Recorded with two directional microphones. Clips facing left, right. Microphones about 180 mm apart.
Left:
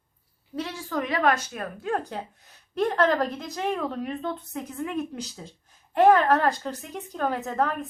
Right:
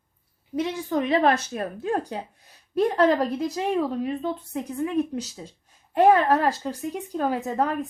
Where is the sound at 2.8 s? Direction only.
15° right (ahead or behind).